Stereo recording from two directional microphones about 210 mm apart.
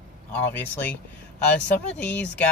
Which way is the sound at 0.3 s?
10° left (ahead or behind).